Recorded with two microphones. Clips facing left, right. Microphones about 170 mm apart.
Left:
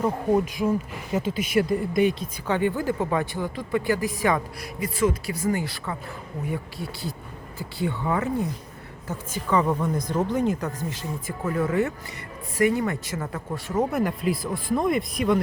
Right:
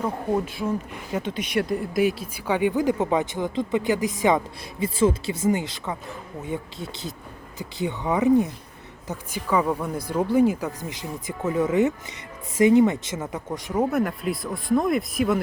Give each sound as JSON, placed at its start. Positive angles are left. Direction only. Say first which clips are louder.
{"t": 0.0, "sound": "speech", "louder": "left 3 dB", "side_deg": 10}
{"t": 13.9, "sound": "speech", "louder": "even", "side_deg": 0}